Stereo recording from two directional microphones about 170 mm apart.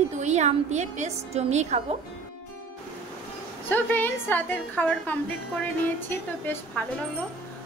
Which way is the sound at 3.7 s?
10° left (ahead or behind).